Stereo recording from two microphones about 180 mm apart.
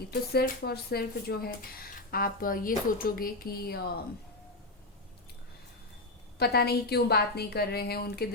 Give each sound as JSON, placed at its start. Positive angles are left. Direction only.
{"t": 0.1, "sound": "speech", "side_deg": 60}
{"t": 6.4, "sound": "speech", "side_deg": 60}